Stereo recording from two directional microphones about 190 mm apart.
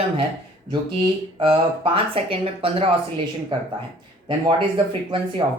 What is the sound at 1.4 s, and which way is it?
Speech, 25° right (ahead or behind).